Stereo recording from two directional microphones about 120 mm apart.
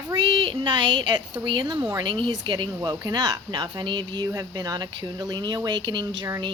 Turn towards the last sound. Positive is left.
turn(degrees=-35)  # may be behind; listen again after turning